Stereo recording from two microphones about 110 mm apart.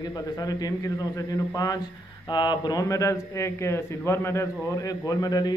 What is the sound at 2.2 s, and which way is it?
Speech, 45° left (ahead or behind).